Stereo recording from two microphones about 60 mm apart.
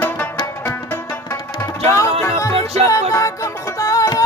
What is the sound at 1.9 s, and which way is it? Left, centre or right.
Music, left.